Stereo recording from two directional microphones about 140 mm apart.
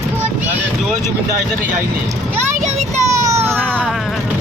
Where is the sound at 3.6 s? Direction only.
10° right (ahead or behind).